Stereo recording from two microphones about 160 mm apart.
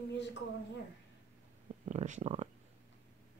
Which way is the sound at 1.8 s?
50° right (ahead or behind).